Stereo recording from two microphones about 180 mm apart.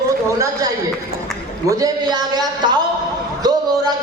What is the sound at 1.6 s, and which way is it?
A man's voice, 20° right (ahead or behind).